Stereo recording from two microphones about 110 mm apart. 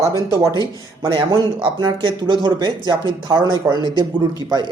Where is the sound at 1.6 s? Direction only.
45° right (ahead or behind).